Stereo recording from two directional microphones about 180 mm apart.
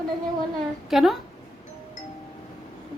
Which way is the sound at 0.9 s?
Centre (ahead or behind).